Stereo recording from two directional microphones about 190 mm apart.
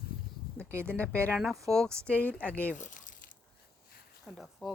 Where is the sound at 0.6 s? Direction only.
15° right (ahead or behind).